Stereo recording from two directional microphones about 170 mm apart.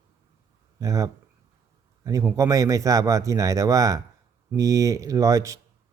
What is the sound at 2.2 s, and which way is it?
Speech, 15° right (ahead or behind).